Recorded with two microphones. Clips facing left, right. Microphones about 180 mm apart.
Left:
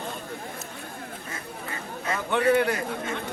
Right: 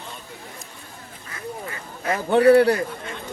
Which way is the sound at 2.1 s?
35° right (ahead or behind).